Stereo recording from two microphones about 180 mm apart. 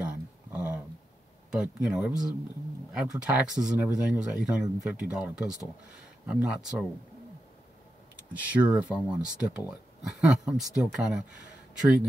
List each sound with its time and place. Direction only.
0.0 s a sound: 5° right (ahead or behind)
1.5 s speech: 5° right (ahead or behind)
8.2 s speech: 10° right (ahead or behind)